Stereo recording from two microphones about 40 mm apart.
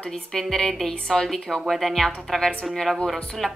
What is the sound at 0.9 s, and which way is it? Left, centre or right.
A woman's voice, centre.